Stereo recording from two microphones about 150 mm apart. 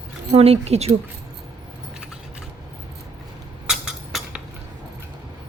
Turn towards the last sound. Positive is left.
turn(degrees=-5)  # may be behind; listen again after turning